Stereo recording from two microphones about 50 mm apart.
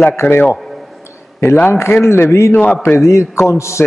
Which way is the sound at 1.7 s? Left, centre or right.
Left.